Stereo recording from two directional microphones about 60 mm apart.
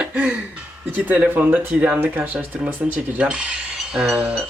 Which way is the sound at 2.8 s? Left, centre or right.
Centre.